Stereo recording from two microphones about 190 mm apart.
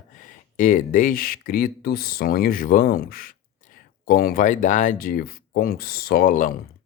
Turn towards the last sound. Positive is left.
turn(degrees=45)  # may be behind; listen again after turning